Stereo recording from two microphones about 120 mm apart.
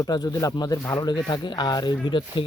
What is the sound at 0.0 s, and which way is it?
Speech, 35° left (ahead or behind).